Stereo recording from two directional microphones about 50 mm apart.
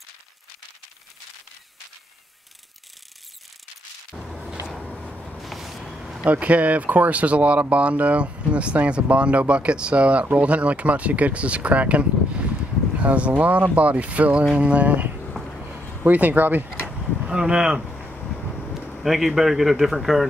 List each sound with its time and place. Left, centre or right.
5.4 s vehicle: centre
6.2 s speech: right
17.2 s speech: centre
19.0 s a man's voice: centre